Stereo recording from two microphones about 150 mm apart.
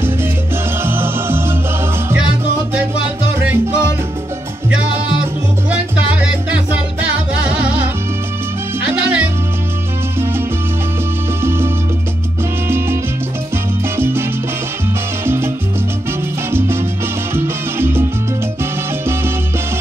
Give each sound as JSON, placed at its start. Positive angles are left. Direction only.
{"t": 0.8, "sound": "music", "side_deg": -15}
{"t": 3.3, "sound": "music", "side_deg": -15}
{"t": 7.3, "sound": "music", "side_deg": -10}
{"t": 11.4, "sound": "music", "side_deg": -15}
{"t": 12.6, "sound": "salsa music", "side_deg": -15}
{"t": 15.2, "sound": "salsa music", "side_deg": -15}
{"t": 16.5, "sound": "salsa music", "side_deg": -15}